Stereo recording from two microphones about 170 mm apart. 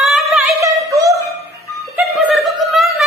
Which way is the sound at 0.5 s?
20° right (ahead or behind).